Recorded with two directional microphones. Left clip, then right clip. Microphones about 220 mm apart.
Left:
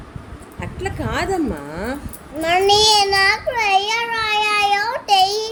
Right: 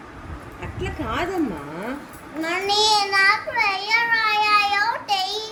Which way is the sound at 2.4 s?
20° left (ahead or behind).